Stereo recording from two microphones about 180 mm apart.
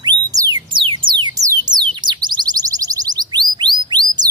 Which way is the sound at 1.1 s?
20° right (ahead or behind).